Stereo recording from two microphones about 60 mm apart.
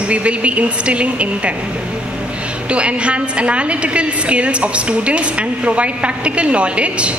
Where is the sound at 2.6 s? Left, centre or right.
Right.